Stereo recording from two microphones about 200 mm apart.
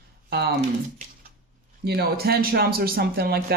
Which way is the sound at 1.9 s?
50° right (ahead or behind).